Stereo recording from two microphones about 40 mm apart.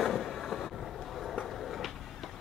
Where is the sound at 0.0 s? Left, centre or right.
Centre.